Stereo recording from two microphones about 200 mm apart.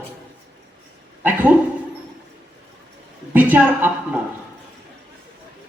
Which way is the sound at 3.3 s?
10° right (ahead or behind).